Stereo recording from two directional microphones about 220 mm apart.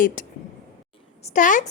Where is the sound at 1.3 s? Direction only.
35° left (ahead or behind).